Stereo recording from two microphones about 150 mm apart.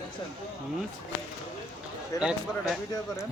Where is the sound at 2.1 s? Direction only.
20° left (ahead or behind).